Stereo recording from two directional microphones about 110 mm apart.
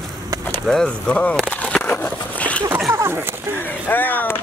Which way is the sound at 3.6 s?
20° left (ahead or behind).